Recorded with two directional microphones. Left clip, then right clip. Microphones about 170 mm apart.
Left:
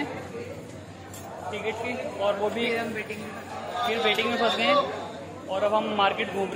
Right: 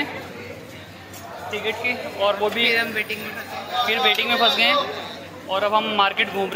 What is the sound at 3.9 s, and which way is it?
A man's voice, 10° right (ahead or behind).